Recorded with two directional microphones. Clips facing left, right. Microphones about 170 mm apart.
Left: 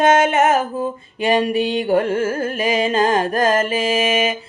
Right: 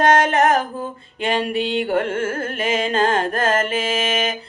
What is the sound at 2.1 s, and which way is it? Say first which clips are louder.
Carnatic music: left 3 dB; 30° left (ahead or behind).